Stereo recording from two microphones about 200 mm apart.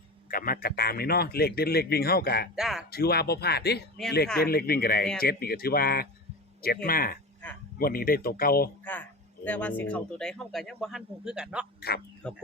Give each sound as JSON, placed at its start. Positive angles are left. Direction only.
{"t": 0.3, "sound": "a man's voice", "side_deg": 45}
{"t": 2.6, "sound": "speech", "side_deg": 0}
{"t": 2.9, "sound": "a man's voice", "side_deg": 50}
{"t": 8.8, "sound": "speech", "side_deg": 10}
{"t": 11.8, "sound": "a man's voice", "side_deg": 55}
{"t": 12.2, "sound": "speech", "side_deg": 5}